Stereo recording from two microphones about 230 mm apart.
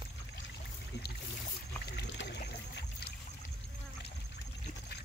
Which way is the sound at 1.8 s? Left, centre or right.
Left.